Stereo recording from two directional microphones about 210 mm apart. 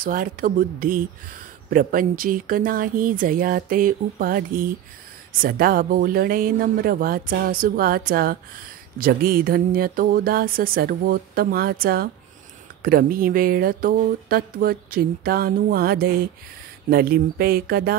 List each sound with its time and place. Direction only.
0.0 s speech: 40° right (ahead or behind)